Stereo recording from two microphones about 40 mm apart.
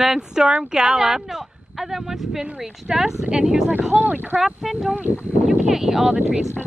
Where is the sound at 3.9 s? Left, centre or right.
Right.